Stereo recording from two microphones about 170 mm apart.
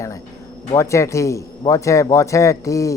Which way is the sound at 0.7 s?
15° left (ahead or behind).